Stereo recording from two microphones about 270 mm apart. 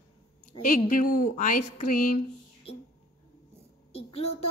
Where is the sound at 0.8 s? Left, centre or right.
Left.